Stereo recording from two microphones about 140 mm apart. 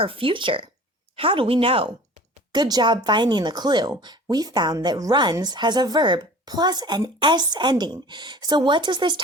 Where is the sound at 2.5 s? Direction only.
30° right (ahead or behind).